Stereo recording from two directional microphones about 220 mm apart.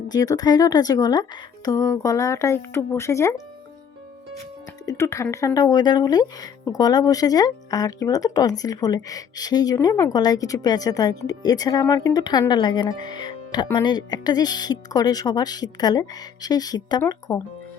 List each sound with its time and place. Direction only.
0.1 s speech: 15° left (ahead or behind)
4.9 s speech: 15° left (ahead or behind)